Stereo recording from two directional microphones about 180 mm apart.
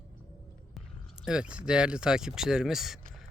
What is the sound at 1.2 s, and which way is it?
Speech, 5° right (ahead or behind).